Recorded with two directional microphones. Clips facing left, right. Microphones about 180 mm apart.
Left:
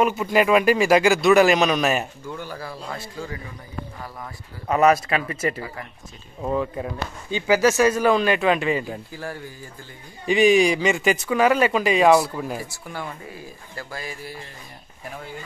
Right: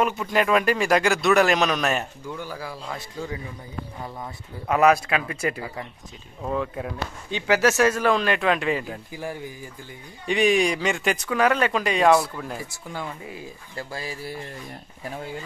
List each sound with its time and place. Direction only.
0.0 s speech: 5° left (ahead or behind)
2.4 s a man's voice: 10° right (ahead or behind)
4.6 s speech: centre (ahead or behind)
9.1 s a man's voice: 15° right (ahead or behind)
10.2 s speech: centre (ahead or behind)
12.7 s speech: 20° right (ahead or behind)